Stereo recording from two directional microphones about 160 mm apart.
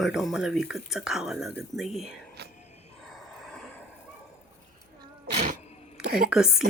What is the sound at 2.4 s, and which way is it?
Whispering, 90° right.